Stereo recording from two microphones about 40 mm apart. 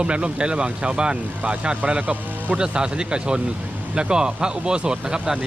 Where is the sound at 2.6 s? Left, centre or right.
Right.